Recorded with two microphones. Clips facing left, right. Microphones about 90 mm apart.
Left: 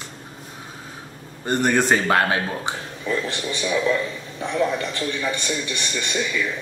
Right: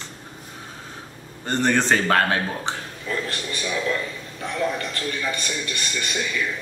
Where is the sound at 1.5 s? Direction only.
15° left (ahead or behind).